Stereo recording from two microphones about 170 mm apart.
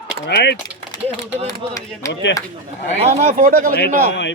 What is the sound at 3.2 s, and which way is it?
Speech, 40° right (ahead or behind).